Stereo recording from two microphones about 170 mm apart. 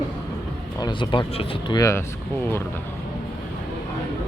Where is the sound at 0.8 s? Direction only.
25° left (ahead or behind).